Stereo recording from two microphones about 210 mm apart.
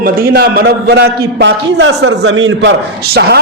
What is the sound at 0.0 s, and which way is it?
A man's voice, 45° right (ahead or behind).